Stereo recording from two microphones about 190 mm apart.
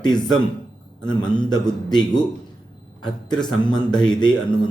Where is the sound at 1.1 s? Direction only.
5° left (ahead or behind).